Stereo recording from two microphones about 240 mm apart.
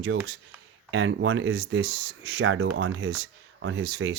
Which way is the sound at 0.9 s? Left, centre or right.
Right.